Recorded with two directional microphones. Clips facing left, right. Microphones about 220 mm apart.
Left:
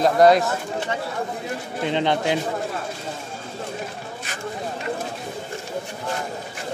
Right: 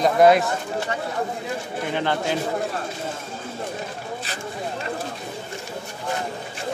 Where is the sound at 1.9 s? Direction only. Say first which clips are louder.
Left 3 dB; 20° left (ahead or behind).